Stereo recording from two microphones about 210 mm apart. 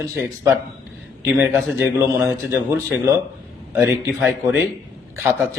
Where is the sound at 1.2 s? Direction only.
5° right (ahead or behind).